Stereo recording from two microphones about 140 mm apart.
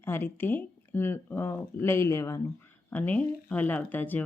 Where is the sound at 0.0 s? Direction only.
15° left (ahead or behind).